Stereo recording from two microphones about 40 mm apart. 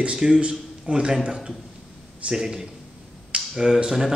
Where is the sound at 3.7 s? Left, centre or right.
Centre.